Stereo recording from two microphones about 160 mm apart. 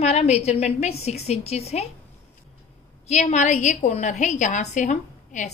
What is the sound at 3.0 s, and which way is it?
A woman's voice, 45° left (ahead or behind).